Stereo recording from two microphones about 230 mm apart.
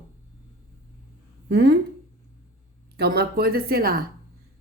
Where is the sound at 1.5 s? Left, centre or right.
Right.